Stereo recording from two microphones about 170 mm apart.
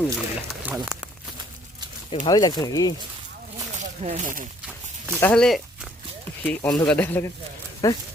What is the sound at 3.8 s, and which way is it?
Speech, 45° right (ahead or behind).